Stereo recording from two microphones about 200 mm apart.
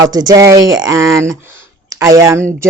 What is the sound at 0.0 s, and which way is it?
Speech, 20° right (ahead or behind).